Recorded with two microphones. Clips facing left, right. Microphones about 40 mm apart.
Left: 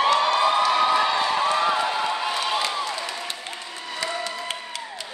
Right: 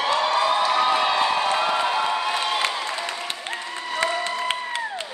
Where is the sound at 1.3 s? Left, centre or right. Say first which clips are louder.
Even; right.